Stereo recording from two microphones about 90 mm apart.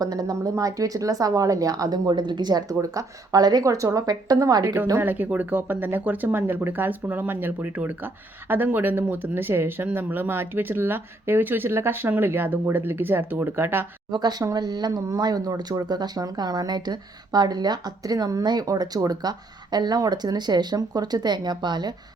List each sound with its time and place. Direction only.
0.0 s a woman's voice: 45° right (ahead or behind)
4.9 s speech: 20° right (ahead or behind)
14.1 s a woman's voice: 50° right (ahead or behind)